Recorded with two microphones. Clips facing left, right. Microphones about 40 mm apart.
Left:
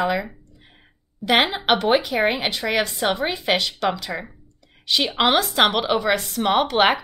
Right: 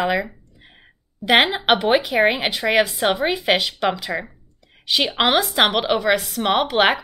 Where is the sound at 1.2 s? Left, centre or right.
Centre.